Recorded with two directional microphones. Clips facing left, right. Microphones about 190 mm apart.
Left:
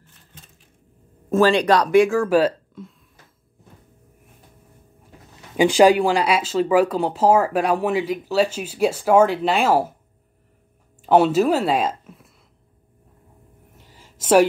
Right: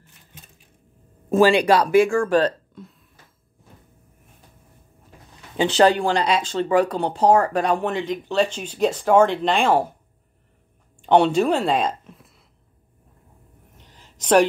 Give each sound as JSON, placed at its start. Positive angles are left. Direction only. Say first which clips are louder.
{"t": 1.3, "sound": "speech", "louder": "right 1 dB", "side_deg": -10}
{"t": 5.6, "sound": "speech", "louder": "left 3 dB", "side_deg": 10}
{"t": 11.0, "sound": "a woman's voice", "louder": "left 1 dB", "side_deg": 5}
{"t": 13.7, "sound": "a sound", "louder": "left 1 dB", "side_deg": 5}